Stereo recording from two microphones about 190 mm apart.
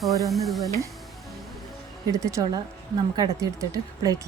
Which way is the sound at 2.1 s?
15° right (ahead or behind).